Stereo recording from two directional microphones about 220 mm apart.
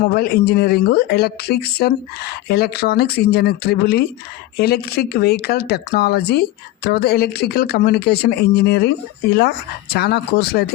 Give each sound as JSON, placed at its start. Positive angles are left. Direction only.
{"t": 0.0, "sound": "speech", "side_deg": 45}